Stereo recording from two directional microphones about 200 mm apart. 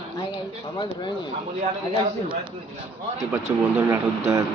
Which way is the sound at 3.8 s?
15° right (ahead or behind).